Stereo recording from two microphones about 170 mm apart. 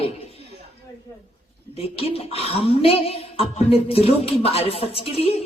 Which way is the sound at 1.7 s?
35° left (ahead or behind).